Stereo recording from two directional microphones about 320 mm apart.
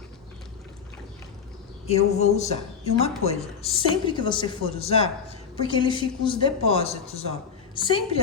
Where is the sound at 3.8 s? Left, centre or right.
Centre.